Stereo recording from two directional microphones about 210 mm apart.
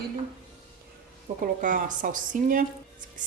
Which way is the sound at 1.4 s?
40° right (ahead or behind).